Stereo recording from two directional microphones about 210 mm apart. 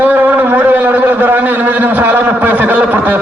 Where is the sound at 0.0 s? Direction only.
10° right (ahead or behind).